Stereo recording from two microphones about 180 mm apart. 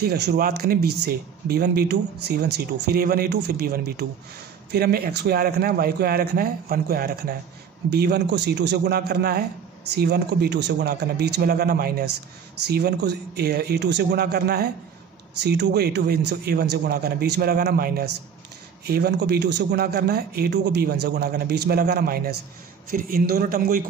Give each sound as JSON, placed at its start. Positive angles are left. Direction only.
{"t": 0.0, "sound": "a man's voice", "side_deg": -60}